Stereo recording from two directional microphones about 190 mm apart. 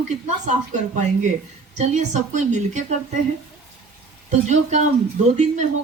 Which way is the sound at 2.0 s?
40° right (ahead or behind).